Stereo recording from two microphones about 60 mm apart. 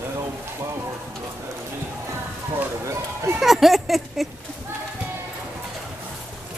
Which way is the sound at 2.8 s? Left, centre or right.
Right.